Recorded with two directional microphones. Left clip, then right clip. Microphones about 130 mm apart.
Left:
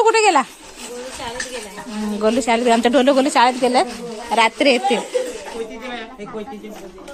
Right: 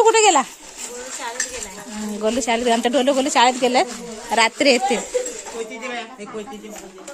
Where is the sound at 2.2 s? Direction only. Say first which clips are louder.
Left 3 dB; 10° right (ahead or behind).